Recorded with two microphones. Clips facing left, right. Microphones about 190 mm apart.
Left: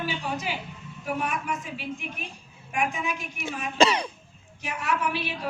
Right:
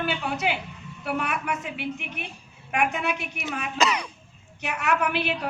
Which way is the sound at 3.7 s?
30° left (ahead or behind).